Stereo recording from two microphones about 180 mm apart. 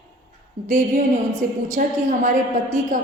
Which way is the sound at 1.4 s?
45° right (ahead or behind).